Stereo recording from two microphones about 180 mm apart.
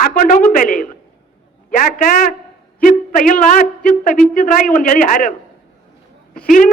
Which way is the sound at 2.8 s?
50° left (ahead or behind).